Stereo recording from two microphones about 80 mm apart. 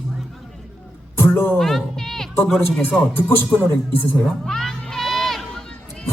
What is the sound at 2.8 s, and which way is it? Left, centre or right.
Speech, left.